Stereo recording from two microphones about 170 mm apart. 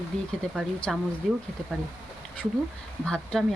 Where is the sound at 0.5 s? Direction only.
Centre (ahead or behind).